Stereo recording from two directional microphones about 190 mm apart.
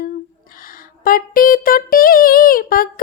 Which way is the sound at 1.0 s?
50° left (ahead or behind).